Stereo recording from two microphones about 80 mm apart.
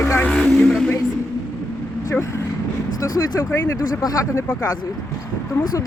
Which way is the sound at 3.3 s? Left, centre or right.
Left.